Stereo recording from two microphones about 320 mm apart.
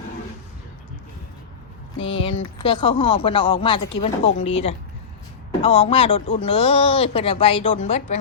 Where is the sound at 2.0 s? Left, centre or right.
Centre.